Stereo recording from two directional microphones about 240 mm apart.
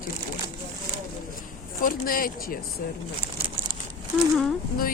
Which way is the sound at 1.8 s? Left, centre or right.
Left.